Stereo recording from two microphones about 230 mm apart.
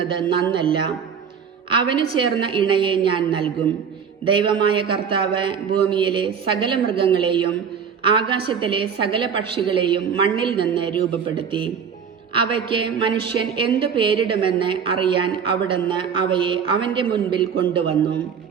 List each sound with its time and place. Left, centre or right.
0.0 s a woman's voice: right